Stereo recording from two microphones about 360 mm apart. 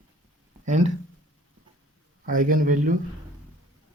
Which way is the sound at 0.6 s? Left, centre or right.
Centre.